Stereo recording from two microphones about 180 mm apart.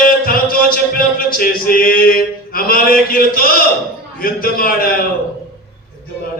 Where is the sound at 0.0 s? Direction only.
55° left (ahead or behind).